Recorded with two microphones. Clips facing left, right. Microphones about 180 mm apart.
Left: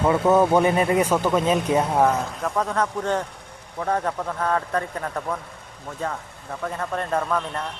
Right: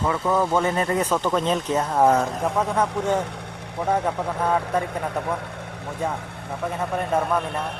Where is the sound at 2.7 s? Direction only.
10° right (ahead or behind).